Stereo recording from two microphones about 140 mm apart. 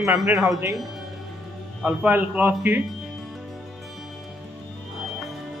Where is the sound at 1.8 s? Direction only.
10° right (ahead or behind).